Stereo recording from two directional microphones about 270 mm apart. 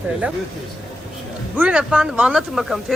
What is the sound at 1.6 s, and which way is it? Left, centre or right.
Speech, centre.